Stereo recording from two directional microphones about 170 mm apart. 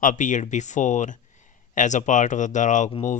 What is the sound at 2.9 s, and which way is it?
Speech, 35° left (ahead or behind).